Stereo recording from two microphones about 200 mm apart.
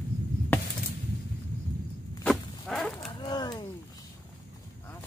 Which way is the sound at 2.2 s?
Centre (ahead or behind).